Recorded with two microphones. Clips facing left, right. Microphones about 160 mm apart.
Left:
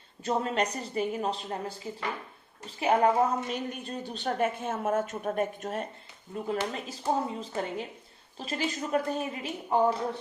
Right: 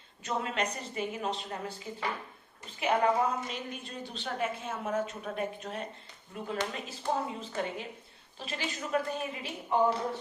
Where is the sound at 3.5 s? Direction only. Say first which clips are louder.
Left 6 dB; 50° left (ahead or behind).